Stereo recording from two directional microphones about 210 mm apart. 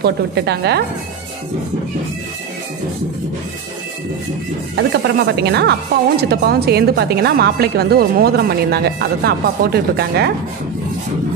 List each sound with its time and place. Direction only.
0.0 s speech: 55° right (ahead or behind)
4.7 s speech: 50° right (ahead or behind)